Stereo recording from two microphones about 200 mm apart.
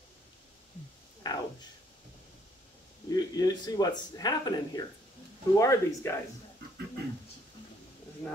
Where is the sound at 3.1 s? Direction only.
20° left (ahead or behind).